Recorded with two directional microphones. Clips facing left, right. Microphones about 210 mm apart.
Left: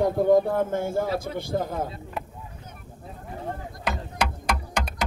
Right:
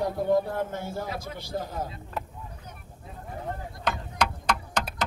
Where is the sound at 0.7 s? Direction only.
50° left (ahead or behind).